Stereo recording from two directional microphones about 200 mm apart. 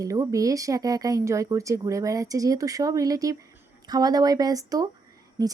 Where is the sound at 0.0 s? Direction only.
15° right (ahead or behind).